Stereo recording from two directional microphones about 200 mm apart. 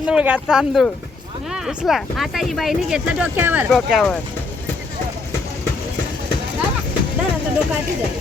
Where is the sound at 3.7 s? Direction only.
5° left (ahead or behind).